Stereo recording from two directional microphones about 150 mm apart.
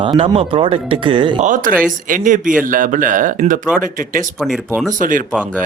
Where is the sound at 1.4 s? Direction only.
60° right (ahead or behind).